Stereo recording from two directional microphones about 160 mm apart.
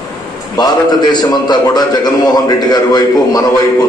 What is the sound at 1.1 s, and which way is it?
A man's voice, 25° left (ahead or behind).